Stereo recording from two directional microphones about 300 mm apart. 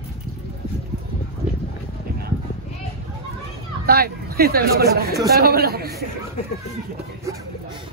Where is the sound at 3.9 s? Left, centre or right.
Right.